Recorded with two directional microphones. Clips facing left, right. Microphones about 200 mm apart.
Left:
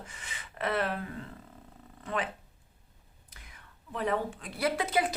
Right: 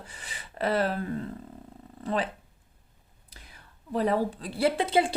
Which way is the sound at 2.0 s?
35° right (ahead or behind).